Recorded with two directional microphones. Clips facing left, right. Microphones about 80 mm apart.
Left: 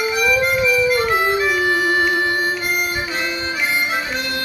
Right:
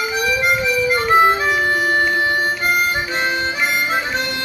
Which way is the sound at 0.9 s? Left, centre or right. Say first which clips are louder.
Right 3 dB; right.